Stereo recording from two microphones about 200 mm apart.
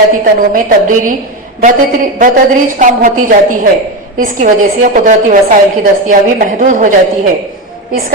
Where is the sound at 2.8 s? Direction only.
40° right (ahead or behind).